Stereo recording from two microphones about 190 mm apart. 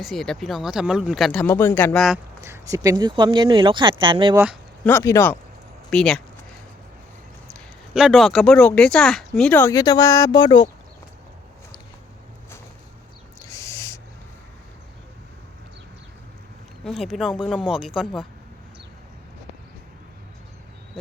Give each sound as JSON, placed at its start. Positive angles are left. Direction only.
{"t": 0.0, "sound": "speech", "side_deg": 0}
{"t": 2.4, "sound": "speech", "side_deg": -15}
{"t": 4.9, "sound": "speech", "side_deg": 15}
{"t": 7.4, "sound": "speech", "side_deg": 0}
{"t": 13.4, "sound": "owl", "side_deg": 15}
{"t": 16.8, "sound": "speech", "side_deg": 0}